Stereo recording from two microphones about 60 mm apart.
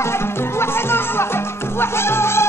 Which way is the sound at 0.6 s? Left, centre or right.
Left.